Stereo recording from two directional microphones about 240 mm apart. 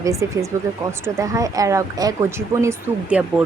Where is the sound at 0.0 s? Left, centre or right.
Centre.